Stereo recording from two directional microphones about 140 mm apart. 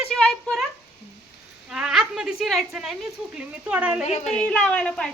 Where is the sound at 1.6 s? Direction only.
5° right (ahead or behind).